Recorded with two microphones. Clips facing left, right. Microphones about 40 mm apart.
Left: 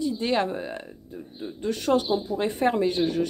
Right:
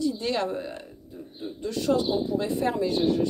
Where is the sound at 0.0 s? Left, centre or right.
Left.